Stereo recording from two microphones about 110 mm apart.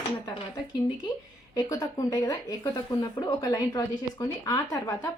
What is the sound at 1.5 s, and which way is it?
A woman's voice, 30° left (ahead or behind).